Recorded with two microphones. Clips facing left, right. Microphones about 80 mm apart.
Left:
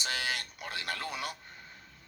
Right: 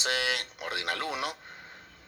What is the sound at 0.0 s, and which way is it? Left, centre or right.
A man's voice, right.